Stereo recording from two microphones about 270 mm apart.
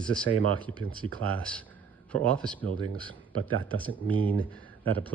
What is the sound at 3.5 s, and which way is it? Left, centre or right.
Speech, right.